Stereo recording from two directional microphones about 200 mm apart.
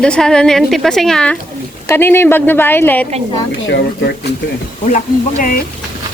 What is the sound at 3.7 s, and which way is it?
Speech, 55° left (ahead or behind).